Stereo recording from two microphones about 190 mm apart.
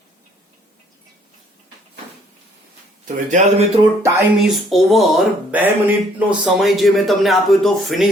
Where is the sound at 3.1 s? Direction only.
40° right (ahead or behind).